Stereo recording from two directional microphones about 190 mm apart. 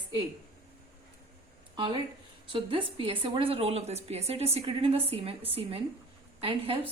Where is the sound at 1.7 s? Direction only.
25° right (ahead or behind).